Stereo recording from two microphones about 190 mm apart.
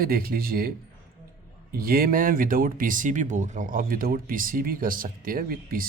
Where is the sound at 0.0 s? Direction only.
50° right (ahead or behind).